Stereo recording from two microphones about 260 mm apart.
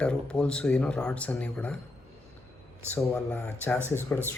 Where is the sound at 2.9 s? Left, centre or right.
Centre.